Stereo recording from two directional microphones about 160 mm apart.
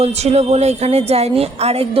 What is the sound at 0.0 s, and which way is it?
A woman's voice, 40° right (ahead or behind).